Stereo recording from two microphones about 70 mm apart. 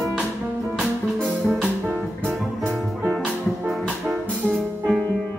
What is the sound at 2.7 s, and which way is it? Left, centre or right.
Music, centre.